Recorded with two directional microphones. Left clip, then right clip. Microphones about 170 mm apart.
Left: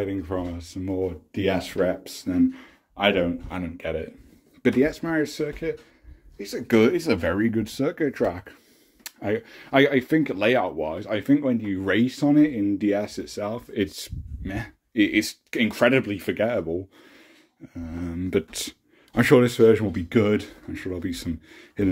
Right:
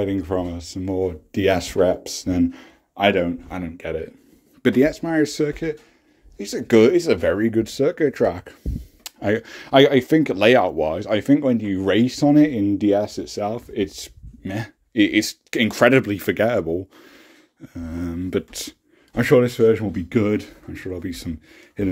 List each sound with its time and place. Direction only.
0.0 s speech: 40° right (ahead or behind)
1.8 s speech: 30° right (ahead or behind)
5.2 s speech: 35° right (ahead or behind)
6.3 s speech: 25° right (ahead or behind)
9.2 s speech: 45° right (ahead or behind)
9.7 s speech: 30° right (ahead or behind)
13.7 s speech: 10° right (ahead or behind)
14.4 s speech: 25° right (ahead or behind)
17.7 s speech: 25° right (ahead or behind)
18.2 s speech: 10° right (ahead or behind)